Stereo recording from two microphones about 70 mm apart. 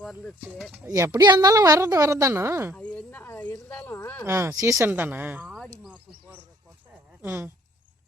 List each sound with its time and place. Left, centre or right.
1.1 s a woman's voice: right
2.7 s a sound: centre
3.2 s snake: left
3.7 s speech: left
4.3 s speech: right
4.9 s speech: right
7.2 s speech: right